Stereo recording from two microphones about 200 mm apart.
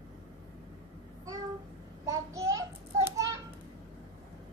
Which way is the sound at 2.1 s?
15° right (ahead or behind).